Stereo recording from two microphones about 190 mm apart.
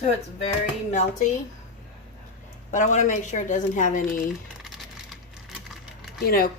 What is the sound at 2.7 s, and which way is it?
A woman's voice, 40° left (ahead or behind).